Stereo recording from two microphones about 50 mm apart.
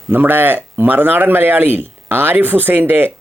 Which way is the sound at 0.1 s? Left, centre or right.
Right.